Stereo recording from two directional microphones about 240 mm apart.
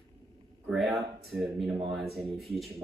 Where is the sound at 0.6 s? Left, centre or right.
Centre.